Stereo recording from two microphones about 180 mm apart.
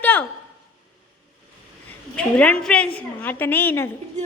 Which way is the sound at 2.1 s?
5° left (ahead or behind).